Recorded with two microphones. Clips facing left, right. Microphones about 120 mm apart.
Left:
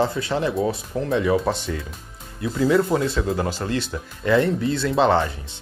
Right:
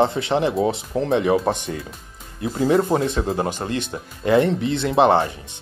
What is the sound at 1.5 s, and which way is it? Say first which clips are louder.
Speech: right 2 dB; 45° right (ahead or behind).